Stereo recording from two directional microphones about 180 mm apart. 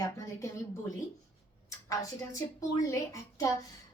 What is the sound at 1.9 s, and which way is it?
Speech, 20° left (ahead or behind).